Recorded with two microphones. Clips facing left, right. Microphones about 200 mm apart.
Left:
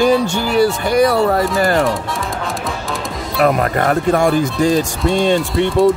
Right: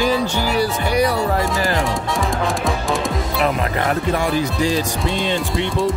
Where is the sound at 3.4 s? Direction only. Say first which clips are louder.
Left 6 dB; 50° left (ahead or behind).